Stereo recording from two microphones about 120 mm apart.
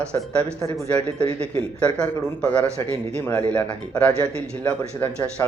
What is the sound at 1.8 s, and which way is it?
Speech, 10° left (ahead or behind).